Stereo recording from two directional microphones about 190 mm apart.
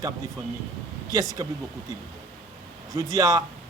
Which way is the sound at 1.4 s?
15° right (ahead or behind).